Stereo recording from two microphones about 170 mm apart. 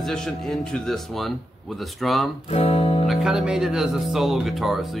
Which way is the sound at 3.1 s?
5° right (ahead or behind).